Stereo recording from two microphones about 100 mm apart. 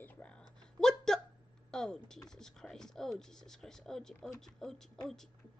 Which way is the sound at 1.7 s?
5° left (ahead or behind).